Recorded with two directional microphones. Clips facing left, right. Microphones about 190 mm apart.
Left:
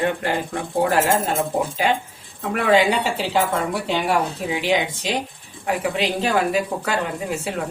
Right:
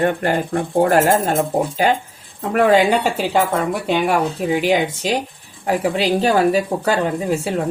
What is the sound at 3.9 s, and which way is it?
A woman's voice, 55° right (ahead or behind).